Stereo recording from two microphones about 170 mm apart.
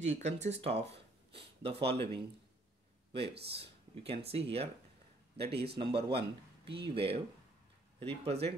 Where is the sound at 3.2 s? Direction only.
75° right (ahead or behind).